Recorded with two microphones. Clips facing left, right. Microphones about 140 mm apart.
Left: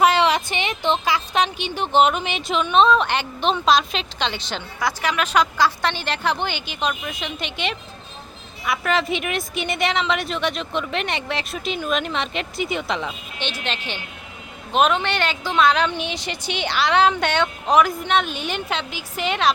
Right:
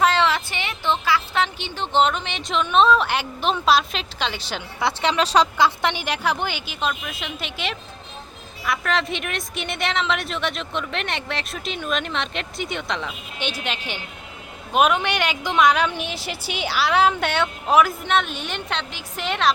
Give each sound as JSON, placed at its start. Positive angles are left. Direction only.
{"t": 0.0, "sound": "a woman's voice", "side_deg": 15}
{"t": 4.8, "sound": "speech", "side_deg": -25}
{"t": 5.5, "sound": "a woman's voice", "side_deg": -20}
{"t": 13.4, "sound": "a woman's voice", "side_deg": -10}